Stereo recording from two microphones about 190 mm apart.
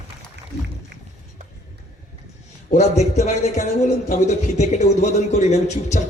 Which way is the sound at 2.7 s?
35° left (ahead or behind).